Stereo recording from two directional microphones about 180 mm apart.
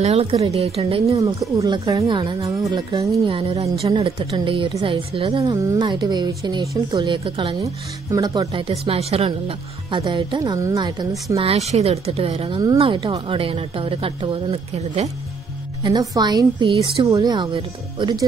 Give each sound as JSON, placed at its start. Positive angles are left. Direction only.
{"t": 0.0, "sound": "speech", "side_deg": -35}
{"t": 1.6, "sound": "speech", "side_deg": -20}
{"t": 15.8, "sound": "speech", "side_deg": -20}